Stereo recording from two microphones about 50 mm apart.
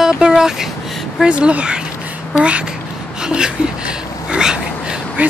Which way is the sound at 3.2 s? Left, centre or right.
Centre.